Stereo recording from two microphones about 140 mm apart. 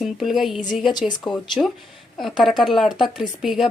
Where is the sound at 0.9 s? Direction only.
30° left (ahead or behind).